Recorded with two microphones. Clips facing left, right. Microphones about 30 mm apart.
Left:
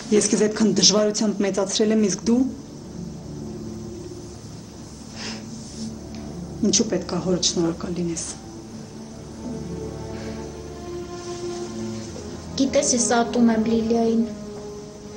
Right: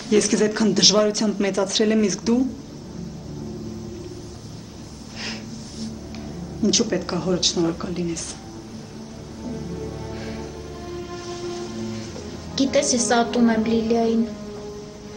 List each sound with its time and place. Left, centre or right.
0.1 s a man's voice: right
5.2 s a sound: right
6.6 s a man's voice: right
9.4 s music: centre
12.5 s a man's voice: right